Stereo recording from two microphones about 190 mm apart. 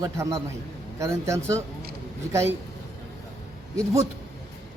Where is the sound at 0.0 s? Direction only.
15° right (ahead or behind).